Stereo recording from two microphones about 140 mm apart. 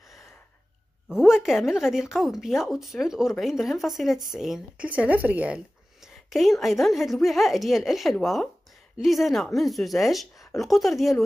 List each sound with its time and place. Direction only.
1.0 s speech: 5° right (ahead or behind)
6.3 s speech: centre (ahead or behind)